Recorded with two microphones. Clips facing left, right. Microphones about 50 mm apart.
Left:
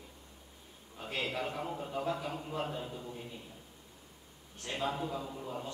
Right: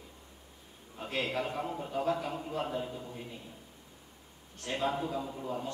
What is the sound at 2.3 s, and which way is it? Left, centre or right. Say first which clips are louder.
Speech: right 2 dB; centre.